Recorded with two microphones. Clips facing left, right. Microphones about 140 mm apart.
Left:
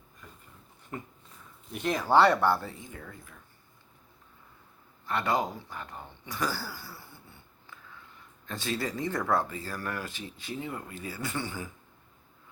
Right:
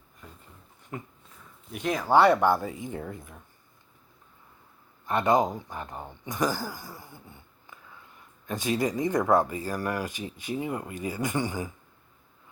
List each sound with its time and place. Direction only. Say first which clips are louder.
1.7 s speech: right 1 dB; 10° right (ahead or behind)
5.0 s speech: right 6 dB; 20° right (ahead or behind)